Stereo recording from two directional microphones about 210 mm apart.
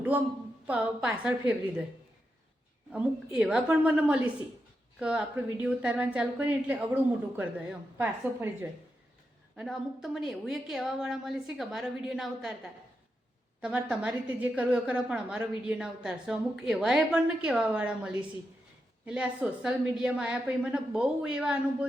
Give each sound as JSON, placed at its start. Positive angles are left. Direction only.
{"t": 0.1, "sound": "a woman's voice", "side_deg": -10}
{"t": 2.9, "sound": "a woman's voice", "side_deg": -5}
{"t": 9.6, "sound": "a woman's voice", "side_deg": 0}
{"t": 13.6, "sound": "a woman's voice", "side_deg": -5}